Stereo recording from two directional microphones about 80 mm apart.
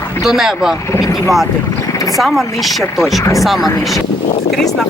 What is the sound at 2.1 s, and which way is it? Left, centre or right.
Speech, centre.